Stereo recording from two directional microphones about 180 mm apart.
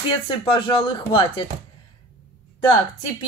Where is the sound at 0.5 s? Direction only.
30° left (ahead or behind).